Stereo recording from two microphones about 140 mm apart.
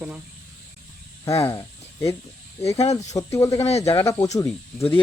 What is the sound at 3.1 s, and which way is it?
Speech, 20° left (ahead or behind).